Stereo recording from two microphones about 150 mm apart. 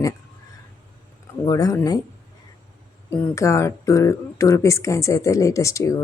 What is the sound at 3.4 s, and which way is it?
Speech, 20° left (ahead or behind).